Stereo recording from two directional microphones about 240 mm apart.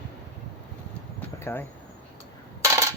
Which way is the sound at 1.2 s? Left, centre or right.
Centre.